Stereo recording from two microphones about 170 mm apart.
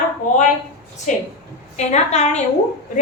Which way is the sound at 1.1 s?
45° left (ahead or behind).